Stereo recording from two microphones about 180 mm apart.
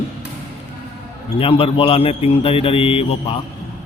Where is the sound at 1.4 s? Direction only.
30° left (ahead or behind).